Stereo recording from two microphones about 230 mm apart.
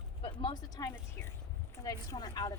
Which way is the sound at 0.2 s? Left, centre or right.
Left.